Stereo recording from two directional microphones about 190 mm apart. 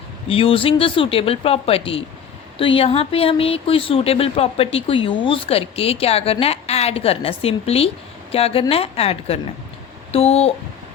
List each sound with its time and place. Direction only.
0.3 s speech: 30° left (ahead or behind)